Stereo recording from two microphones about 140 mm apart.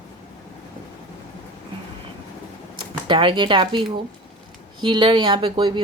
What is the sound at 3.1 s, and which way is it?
Speech, 35° right (ahead or behind).